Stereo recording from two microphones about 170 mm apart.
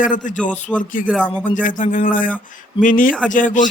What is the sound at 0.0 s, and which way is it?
Speech, 50° left (ahead or behind).